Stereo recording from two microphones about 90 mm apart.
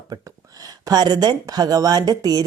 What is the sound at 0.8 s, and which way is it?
Speech, 50° right (ahead or behind).